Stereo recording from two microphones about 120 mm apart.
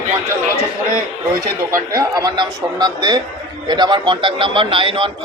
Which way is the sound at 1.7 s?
30° right (ahead or behind).